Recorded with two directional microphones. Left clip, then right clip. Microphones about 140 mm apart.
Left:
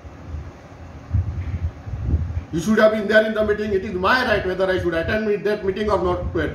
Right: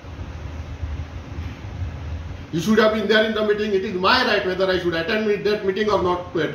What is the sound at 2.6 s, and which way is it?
A man's voice, 25° left (ahead or behind).